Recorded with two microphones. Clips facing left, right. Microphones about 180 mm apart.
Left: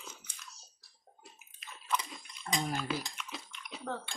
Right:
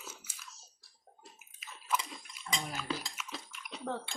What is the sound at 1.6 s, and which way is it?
Bathtub, 5° right (ahead or behind).